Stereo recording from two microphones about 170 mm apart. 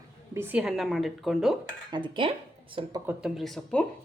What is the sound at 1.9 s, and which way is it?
Speech, 30° right (ahead or behind).